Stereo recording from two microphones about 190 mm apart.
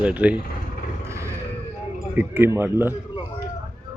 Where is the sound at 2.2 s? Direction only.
10° right (ahead or behind).